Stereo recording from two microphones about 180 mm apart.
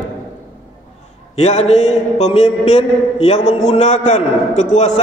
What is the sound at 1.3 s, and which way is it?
A man's voice, 40° left (ahead or behind).